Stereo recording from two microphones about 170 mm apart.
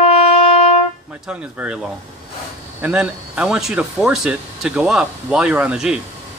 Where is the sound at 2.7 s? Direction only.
10° right (ahead or behind).